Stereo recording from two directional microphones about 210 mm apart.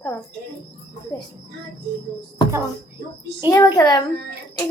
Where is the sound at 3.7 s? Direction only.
20° left (ahead or behind).